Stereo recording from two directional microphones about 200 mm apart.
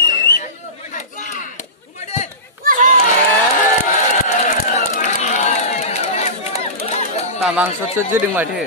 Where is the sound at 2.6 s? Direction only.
45° right (ahead or behind).